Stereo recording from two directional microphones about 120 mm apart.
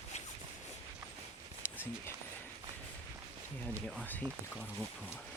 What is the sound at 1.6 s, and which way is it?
Clip-clop, 20° left (ahead or behind).